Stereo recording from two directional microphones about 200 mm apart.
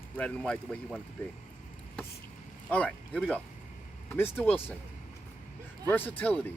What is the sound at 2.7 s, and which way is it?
Speech, 5° left (ahead or behind).